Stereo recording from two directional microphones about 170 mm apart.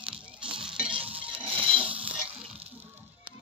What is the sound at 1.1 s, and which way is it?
Music, 30° right (ahead or behind).